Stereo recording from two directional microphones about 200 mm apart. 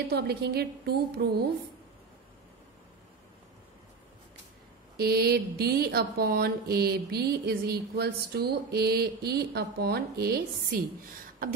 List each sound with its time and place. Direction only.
0.1 s speech: 55° right (ahead or behind)
4.9 s speech: 50° right (ahead or behind)